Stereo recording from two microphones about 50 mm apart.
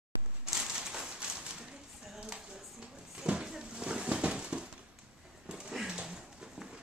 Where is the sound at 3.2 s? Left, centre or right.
Centre.